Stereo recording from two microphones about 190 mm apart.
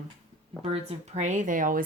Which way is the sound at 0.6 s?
30° right (ahead or behind).